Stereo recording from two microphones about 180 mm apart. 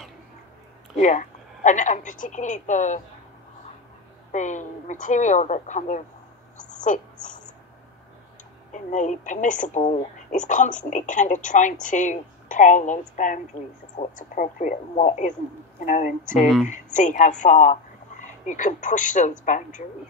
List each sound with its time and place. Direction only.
0.9 s speech: 45° left (ahead or behind)
4.3 s a woman's voice: 45° left (ahead or behind)
8.7 s a woman's voice: 40° left (ahead or behind)